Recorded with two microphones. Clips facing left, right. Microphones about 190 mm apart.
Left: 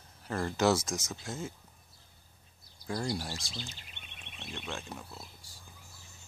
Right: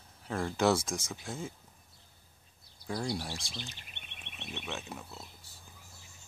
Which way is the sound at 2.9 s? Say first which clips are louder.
Left 1 dB; centre (ahead or behind).